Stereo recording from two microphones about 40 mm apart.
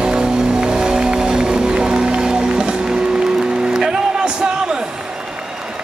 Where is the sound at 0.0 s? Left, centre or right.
Right.